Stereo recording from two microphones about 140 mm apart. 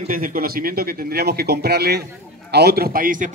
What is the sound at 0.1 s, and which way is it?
Speech, 90° right.